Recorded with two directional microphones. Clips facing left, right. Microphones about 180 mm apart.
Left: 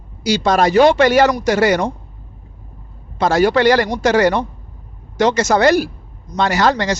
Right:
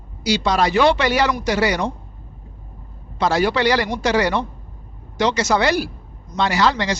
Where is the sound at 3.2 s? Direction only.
50° left (ahead or behind).